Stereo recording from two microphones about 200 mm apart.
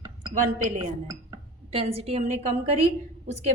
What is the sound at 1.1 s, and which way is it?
A woman's voice, 25° right (ahead or behind).